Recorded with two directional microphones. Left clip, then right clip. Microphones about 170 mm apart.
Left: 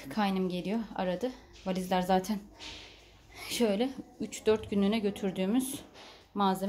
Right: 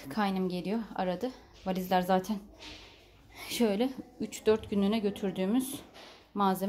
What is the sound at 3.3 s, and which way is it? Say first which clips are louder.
A woman's voice: even; 5° right (ahead or behind).